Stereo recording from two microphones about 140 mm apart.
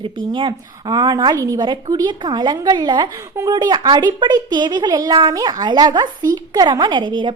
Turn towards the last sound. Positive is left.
turn(degrees=-35)  # may be behind; listen again after turning